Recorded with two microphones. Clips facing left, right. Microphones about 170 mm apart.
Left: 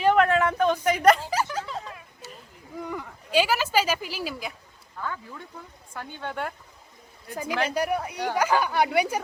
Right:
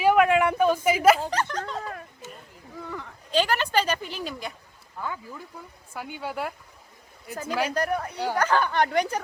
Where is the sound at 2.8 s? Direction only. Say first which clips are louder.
Left 3 dB; 10° left (ahead or behind).